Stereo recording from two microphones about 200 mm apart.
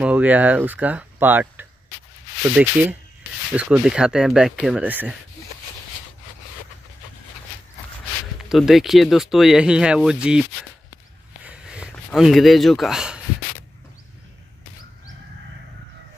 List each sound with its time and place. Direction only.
0.0 s speech: 5° right (ahead or behind)
8.5 s speech: centre (ahead or behind)
11.4 s a sound: 5° right (ahead or behind)